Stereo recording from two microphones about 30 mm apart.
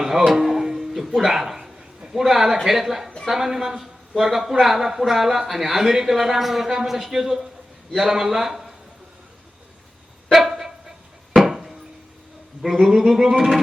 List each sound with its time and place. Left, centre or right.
0.0 s speech: centre
0.4 s music: centre
2.0 s a sound: centre
2.2 s a man's voice: centre
10.3 s a sound: centre
11.3 s chop: centre
12.7 s a man's voice: centre